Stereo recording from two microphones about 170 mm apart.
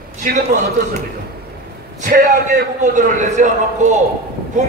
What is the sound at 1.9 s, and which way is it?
A man's voice, 45° right (ahead or behind).